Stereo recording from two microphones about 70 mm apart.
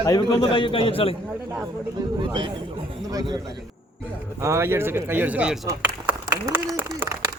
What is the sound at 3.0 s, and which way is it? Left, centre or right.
Speech, right.